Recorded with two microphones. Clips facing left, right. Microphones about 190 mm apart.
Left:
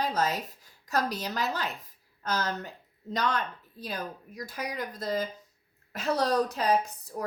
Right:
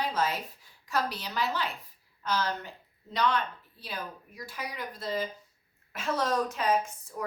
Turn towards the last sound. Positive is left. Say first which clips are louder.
# left 2 dB
turn(degrees=35)  # may be behind; listen again after turning